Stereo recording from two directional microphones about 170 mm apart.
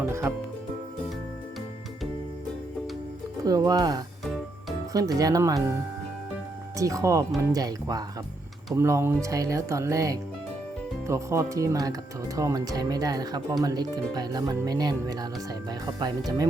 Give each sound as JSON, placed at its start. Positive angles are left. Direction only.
{"t": 0.0, "sound": "speech", "side_deg": -15}
{"t": 3.4, "sound": "speech", "side_deg": -20}
{"t": 6.7, "sound": "speech", "side_deg": -20}